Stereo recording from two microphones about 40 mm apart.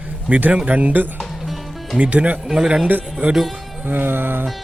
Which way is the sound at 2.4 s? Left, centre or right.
Centre.